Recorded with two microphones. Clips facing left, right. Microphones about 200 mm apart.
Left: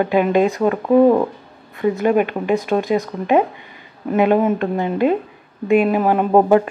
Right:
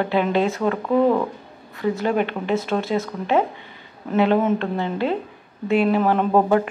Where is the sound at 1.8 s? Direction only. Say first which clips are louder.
Left 5 dB; 15° left (ahead or behind).